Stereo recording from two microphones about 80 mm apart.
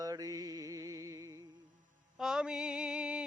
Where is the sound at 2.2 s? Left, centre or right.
Centre.